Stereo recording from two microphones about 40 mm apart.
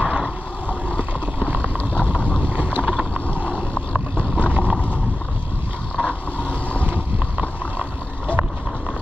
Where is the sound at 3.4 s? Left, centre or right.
Right.